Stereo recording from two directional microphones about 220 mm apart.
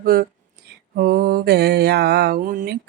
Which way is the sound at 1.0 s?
45° right (ahead or behind).